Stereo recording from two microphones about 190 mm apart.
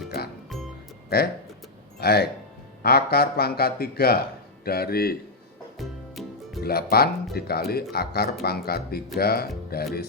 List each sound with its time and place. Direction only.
1.1 s speech: 55° left (ahead or behind)
5.7 s music: centre (ahead or behind)
6.6 s speech: 55° left (ahead or behind)